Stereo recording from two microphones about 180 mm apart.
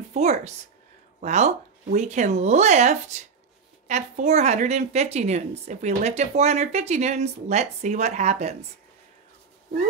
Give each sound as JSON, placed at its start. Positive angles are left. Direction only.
{"t": 0.1, "sound": "a woman's voice", "side_deg": -40}